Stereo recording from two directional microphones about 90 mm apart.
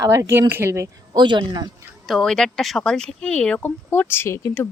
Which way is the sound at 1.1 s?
60° right (ahead or behind).